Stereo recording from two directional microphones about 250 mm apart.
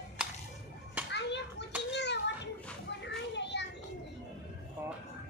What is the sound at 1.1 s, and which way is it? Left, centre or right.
Children playing, left.